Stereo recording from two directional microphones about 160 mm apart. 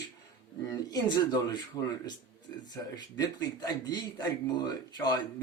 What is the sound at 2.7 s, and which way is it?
A man's voice, 25° left (ahead or behind).